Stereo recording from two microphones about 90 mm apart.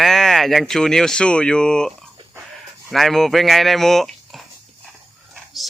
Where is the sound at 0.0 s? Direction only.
5° left (ahead or behind).